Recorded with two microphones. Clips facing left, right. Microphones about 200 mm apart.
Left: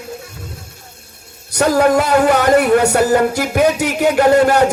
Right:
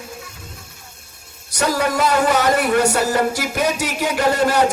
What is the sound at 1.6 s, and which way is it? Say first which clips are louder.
Speech: left 6 dB; 50° left (ahead or behind).